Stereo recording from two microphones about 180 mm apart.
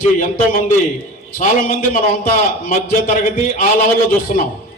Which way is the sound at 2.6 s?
50° left (ahead or behind).